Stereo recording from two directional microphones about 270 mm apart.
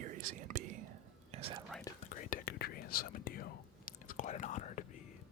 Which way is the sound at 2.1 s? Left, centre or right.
Left.